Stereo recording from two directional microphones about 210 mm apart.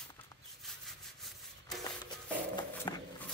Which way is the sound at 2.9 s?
20° left (ahead or behind).